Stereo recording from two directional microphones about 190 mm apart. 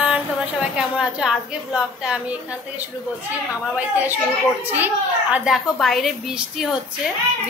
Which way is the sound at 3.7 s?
10° right (ahead or behind).